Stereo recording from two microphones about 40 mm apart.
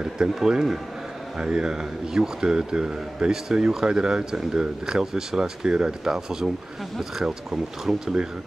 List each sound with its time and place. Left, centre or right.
0.5 s a man's voice: centre